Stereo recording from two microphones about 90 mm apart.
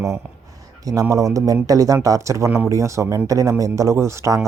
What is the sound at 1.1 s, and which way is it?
Speech, 40° right (ahead or behind).